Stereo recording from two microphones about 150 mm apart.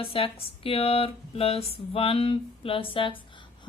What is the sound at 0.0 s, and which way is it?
Speech, 40° left (ahead or behind).